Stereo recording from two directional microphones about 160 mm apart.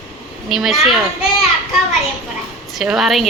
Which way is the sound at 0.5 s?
Centre (ahead or behind).